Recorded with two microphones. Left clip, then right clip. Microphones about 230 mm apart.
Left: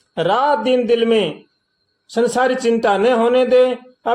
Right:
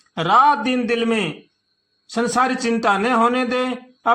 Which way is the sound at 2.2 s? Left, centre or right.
Right.